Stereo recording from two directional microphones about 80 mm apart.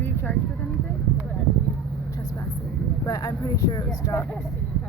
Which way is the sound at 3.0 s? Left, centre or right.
Left.